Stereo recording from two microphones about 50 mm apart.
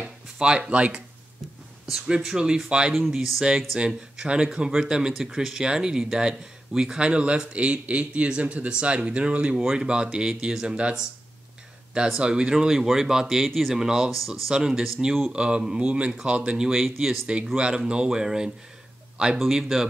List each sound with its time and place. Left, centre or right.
0.4 s speech: centre
1.9 s speech: centre
5.1 s speech: centre; by 11.1 s right
12.2 s speech: centre